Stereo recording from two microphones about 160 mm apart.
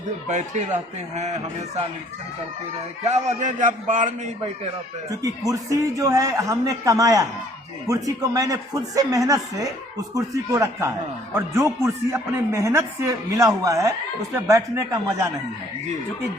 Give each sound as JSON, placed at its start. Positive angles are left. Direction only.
{"t": 0.3, "sound": "a man's voice", "side_deg": -50}
{"t": 3.0, "sound": "a man's voice", "side_deg": -45}
{"t": 5.5, "sound": "speech", "side_deg": -20}